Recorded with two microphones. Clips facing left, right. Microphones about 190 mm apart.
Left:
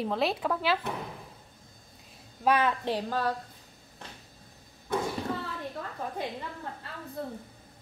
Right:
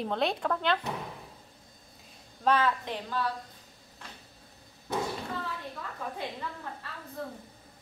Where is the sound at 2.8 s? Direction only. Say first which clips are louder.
Left 4 dB; 40° left (ahead or behind).